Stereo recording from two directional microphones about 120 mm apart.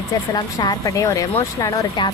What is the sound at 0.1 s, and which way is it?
A woman's voice, 35° left (ahead or behind).